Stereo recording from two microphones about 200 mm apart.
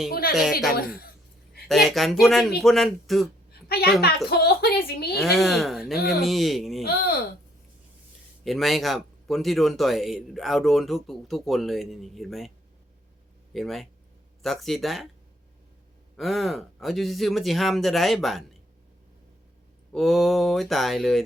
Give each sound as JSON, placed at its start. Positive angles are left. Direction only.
{"t": 0.1, "sound": "speech", "side_deg": 50}
{"t": 1.6, "sound": "speech", "side_deg": 0}
{"t": 3.7, "sound": "a sound", "side_deg": 50}
{"t": 4.3, "sound": "a woman's voice", "side_deg": 50}
{"t": 5.1, "sound": "speech", "side_deg": 0}
{"t": 6.8, "sound": "speech", "side_deg": 50}
{"t": 8.4, "sound": "speech", "side_deg": 0}
{"t": 13.5, "sound": "speech", "side_deg": 0}
{"t": 16.1, "sound": "speech", "side_deg": 0}
{"t": 19.9, "sound": "speech", "side_deg": 0}